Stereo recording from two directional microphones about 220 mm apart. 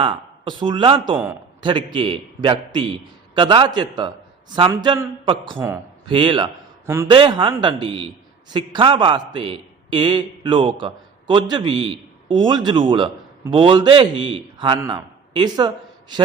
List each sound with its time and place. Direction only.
0.0 s speech: 20° right (ahead or behind)
1.1 s a man's voice: 5° right (ahead or behind)
1.6 s a man's voice: 20° right (ahead or behind)
6.1 s a man's voice: 20° right (ahead or behind)